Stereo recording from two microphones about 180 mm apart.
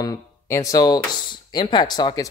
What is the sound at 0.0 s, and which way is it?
Speech, 20° left (ahead or behind).